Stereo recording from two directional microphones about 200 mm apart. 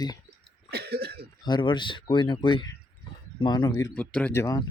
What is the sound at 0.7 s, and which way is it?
Cough, 55° right (ahead or behind).